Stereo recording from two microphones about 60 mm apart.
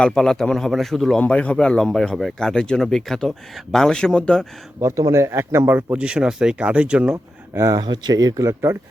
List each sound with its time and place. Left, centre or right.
0.0 s speech: centre
1.3 s speech: centre
4.8 s speech: right
6.0 s speech: centre
7.5 s speech: right
8.4 s speech: right